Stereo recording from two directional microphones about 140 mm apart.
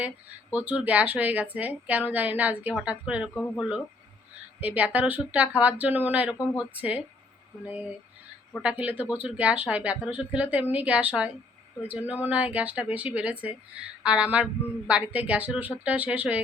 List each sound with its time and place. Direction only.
0.5 s a woman's voice: 10° right (ahead or behind)
3.3 s speech: 15° left (ahead or behind)
4.6 s a woman's voice: 10° right (ahead or behind)